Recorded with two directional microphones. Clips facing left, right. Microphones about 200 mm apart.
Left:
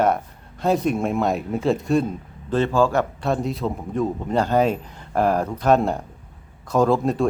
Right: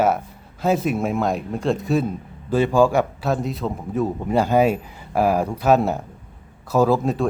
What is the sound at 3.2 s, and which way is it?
A man's voice, centre (ahead or behind).